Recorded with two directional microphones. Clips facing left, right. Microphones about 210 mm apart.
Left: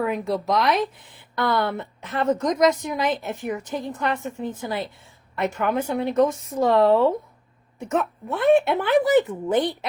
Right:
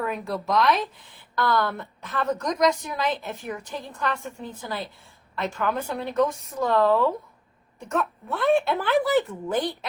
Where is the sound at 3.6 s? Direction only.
20° left (ahead or behind).